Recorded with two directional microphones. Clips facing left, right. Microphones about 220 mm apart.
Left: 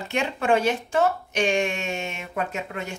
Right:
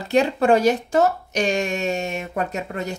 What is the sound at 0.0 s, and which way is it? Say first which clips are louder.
Speech: right 8 dB; 35° right (ahead or behind).